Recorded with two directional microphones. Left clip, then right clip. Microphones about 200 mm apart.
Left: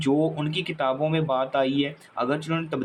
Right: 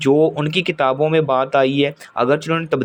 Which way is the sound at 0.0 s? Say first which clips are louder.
Right 9 dB; 45° right (ahead or behind).